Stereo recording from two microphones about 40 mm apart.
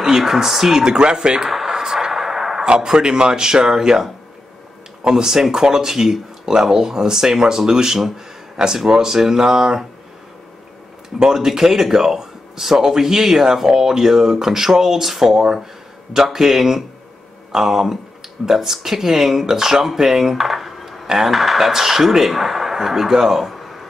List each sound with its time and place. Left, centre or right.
0.0 s speech: centre
1.5 s a sound: centre
2.6 s speech: centre
5.0 s speech: centre
11.1 s a man's voice: centre